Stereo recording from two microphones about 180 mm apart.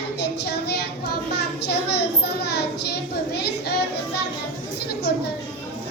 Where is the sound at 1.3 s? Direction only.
65° left (ahead or behind).